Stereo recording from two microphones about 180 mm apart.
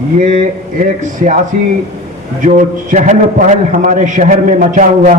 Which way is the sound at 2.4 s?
45° right (ahead or behind).